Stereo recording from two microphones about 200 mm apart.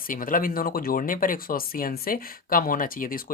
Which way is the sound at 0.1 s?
45° left (ahead or behind).